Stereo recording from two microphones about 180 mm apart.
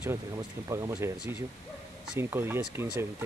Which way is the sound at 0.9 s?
10° right (ahead or behind).